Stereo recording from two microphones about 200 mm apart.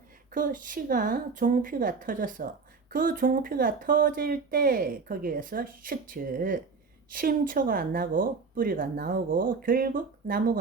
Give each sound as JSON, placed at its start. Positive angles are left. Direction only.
{"t": 0.3, "sound": "speech", "side_deg": -45}